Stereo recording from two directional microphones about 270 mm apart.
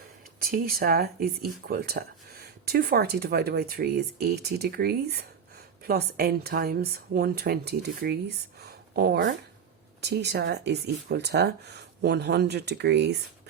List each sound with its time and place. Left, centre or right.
0.5 s speech: right
8.6 s a sound: right
10.0 s speech: right